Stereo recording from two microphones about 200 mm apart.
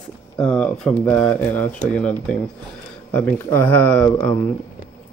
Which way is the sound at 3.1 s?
10° left (ahead or behind).